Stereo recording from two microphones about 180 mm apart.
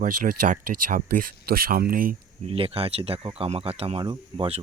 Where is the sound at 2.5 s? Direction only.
30° right (ahead or behind).